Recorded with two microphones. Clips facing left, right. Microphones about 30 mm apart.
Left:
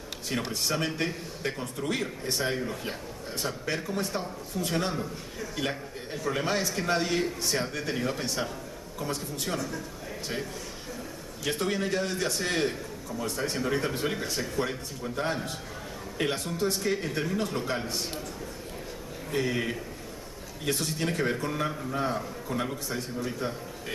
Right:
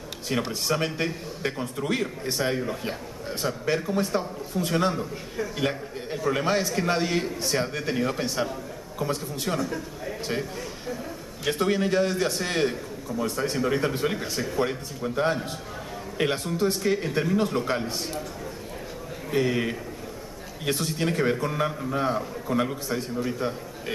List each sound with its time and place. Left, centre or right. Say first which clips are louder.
0.5 s a man's voice: right 3 dB; centre
11.4 s a man's voice: right 5 dB; centre
19.3 s a man's voice: right 4 dB; centre